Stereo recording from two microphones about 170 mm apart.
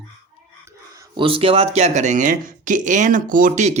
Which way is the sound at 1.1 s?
30° right (ahead or behind).